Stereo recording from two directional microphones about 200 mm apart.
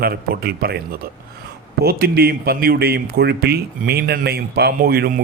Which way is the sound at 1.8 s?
50° right (ahead or behind).